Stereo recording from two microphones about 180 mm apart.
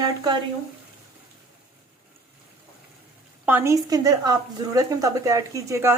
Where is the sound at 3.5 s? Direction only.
15° right (ahead or behind).